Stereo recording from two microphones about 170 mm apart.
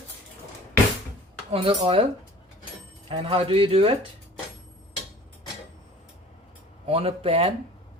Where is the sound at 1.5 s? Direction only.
25° right (ahead or behind).